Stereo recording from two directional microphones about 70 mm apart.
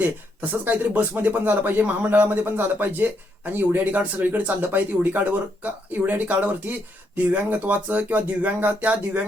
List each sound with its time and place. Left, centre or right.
0.6 s speech: right